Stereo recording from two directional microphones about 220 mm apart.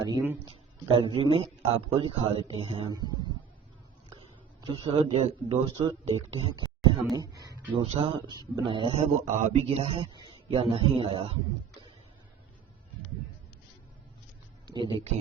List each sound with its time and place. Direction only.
0.0 s speech: 10° right (ahead or behind)
0.9 s speech: 25° right (ahead or behind)
4.6 s speech: 25° right (ahead or behind)
7.1 s speech: 15° right (ahead or behind)
14.7 s speech: 20° right (ahead or behind)